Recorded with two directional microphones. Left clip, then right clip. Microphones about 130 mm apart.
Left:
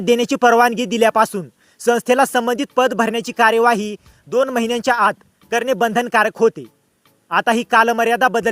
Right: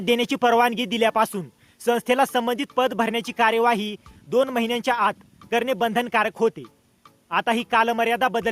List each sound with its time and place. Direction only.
0.0 s speech: 35° left (ahead or behind)